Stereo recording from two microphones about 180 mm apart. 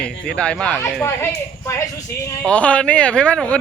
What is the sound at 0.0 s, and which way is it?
Speech, 5° left (ahead or behind).